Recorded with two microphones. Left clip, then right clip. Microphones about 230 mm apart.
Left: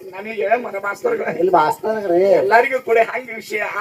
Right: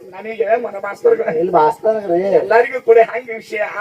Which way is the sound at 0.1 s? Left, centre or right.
Left.